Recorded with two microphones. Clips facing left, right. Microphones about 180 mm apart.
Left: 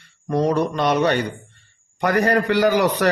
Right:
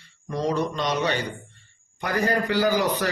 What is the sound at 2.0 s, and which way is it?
A man's voice, 70° left (ahead or behind).